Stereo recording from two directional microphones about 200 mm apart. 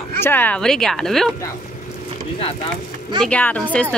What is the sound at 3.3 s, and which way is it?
Speech, 5° left (ahead or behind).